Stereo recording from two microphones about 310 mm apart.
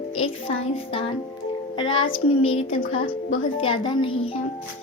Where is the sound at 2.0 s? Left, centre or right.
Left.